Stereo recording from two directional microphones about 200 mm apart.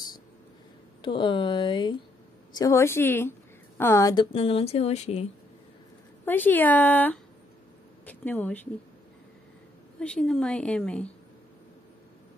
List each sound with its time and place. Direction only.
1.0 s a woman's voice: 25° left (ahead or behind)
6.2 s speech: 10° left (ahead or behind)
9.9 s a woman's voice: 5° left (ahead or behind)